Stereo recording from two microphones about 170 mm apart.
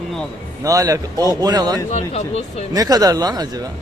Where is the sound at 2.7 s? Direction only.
20° right (ahead or behind).